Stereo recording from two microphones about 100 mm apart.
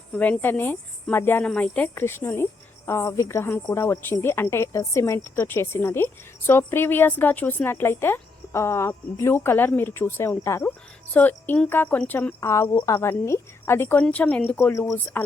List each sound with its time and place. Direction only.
0.2 s a woman's voice: 15° left (ahead or behind)
14.7 s a woman's voice: 30° left (ahead or behind)